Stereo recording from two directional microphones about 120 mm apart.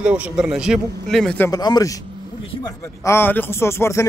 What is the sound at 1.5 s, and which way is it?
Speech, 35° left (ahead or behind).